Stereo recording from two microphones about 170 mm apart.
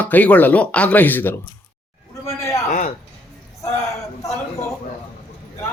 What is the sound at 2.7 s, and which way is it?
Speech, 45° left (ahead or behind).